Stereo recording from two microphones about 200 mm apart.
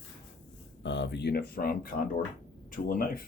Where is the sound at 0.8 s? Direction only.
65° left (ahead or behind); by 3.2 s 45° left (ahead or behind).